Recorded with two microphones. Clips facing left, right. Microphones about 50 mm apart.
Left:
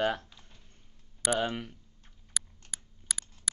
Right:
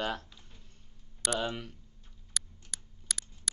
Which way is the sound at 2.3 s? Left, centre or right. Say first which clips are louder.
Left 1 dB; centre.